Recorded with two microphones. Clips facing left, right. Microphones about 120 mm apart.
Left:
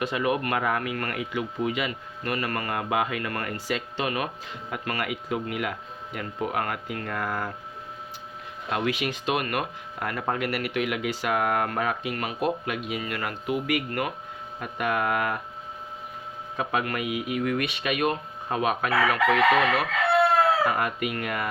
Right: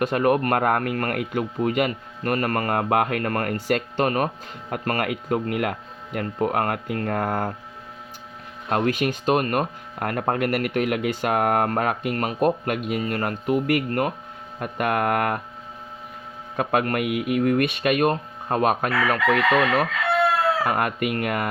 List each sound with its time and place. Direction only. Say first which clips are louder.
0.0 s speech: right 6 dB; 50° right (ahead or behind)
8.7 s speech: right 5 dB; 45° right (ahead or behind)
14.6 s speech: right 4 dB; 55° right (ahead or behind)
16.6 s speech: right 5 dB; 50° right (ahead or behind)
20.7 s speech: right 3 dB; 55° right (ahead or behind)